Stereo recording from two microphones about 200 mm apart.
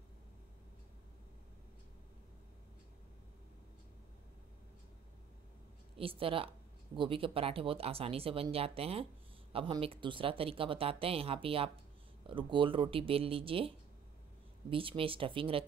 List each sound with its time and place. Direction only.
5.9 s speech: 25° right (ahead or behind)